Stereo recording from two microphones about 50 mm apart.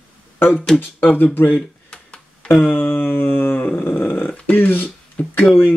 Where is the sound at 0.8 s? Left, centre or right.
Left.